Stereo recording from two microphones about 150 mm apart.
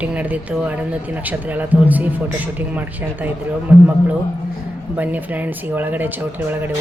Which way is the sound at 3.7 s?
10° right (ahead or behind).